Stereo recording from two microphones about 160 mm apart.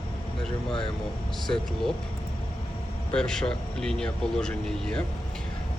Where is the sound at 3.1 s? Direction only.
5° left (ahead or behind).